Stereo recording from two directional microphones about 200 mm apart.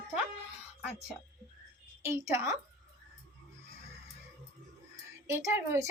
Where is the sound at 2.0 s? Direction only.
10° right (ahead or behind).